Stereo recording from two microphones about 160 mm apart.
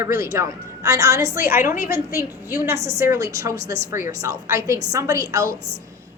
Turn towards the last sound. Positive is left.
turn(degrees=-20)  # may be behind; listen again after turning